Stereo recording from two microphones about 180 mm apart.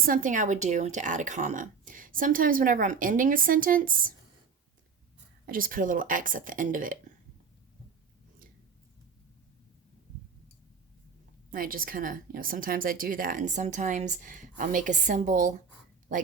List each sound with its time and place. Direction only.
0.0 s a woman's voice: 50° right (ahead or behind)
5.5 s a woman's voice: 50° right (ahead or behind)
11.5 s a woman's voice: 50° right (ahead or behind)